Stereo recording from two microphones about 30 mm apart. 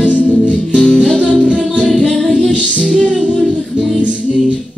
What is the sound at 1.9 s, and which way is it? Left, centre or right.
Music, centre.